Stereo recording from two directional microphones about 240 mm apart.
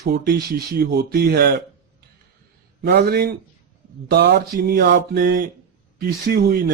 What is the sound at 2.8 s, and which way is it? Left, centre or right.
Speech, right.